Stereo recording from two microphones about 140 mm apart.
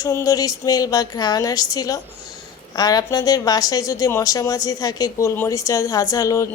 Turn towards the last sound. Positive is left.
turn(degrees=25)  # may be behind; listen again after turning